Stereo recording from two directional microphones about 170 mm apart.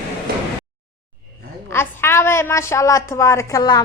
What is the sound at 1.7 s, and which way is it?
A woman's voice, 15° left (ahead or behind).